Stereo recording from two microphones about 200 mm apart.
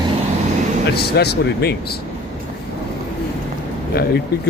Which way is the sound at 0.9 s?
55° left (ahead or behind).